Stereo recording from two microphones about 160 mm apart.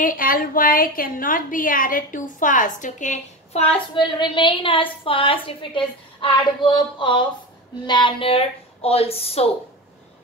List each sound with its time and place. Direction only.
0.0 s a woman's voice: 60° left (ahead or behind)
3.9 s a woman's voice: 30° left (ahead or behind)